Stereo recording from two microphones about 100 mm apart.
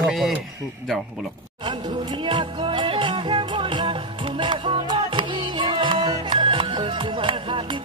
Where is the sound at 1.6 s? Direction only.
50° right (ahead or behind).